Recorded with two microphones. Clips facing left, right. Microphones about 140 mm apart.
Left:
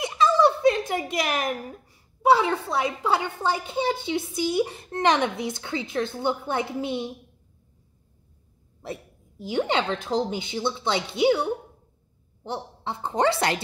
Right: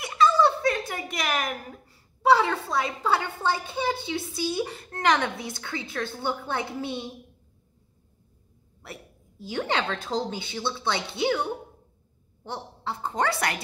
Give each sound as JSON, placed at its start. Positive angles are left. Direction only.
{"t": 0.0, "sound": "speech", "side_deg": 20}
{"t": 8.8, "sound": "speech", "side_deg": 20}